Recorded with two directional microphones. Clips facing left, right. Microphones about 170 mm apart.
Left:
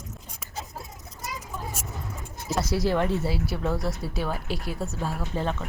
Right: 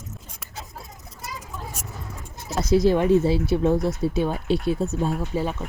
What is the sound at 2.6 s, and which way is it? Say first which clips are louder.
Speech: right 8 dB; 20° right (ahead or behind).